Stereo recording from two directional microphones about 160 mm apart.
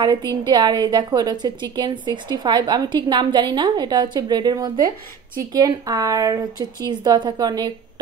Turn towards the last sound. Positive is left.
turn(degrees=-25)  # may be behind; listen again after turning